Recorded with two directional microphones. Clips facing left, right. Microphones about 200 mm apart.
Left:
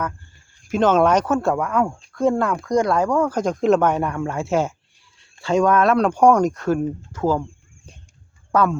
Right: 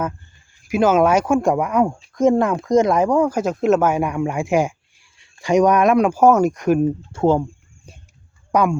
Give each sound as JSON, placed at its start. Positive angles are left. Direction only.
{"t": 0.7, "sound": "speech", "side_deg": -10}
{"t": 7.1, "sound": "speech", "side_deg": -25}
{"t": 8.5, "sound": "speech", "side_deg": -15}